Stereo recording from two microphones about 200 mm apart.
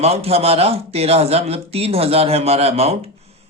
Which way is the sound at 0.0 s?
30° right (ahead or behind).